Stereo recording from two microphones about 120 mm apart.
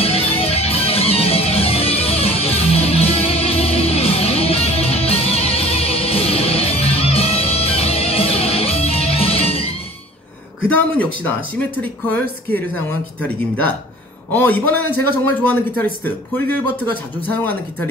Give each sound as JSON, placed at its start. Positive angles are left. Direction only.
{"t": 0.0, "sound": "music", "side_deg": 55}
{"t": 10.7, "sound": "speech", "side_deg": 15}